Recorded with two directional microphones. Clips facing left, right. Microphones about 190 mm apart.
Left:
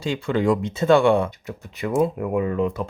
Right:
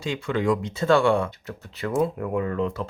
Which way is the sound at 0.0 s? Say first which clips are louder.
Left 3 dB; 30° left (ahead or behind).